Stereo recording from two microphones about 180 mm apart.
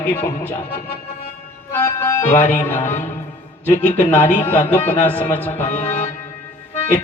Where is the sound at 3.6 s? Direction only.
10° left (ahead or behind).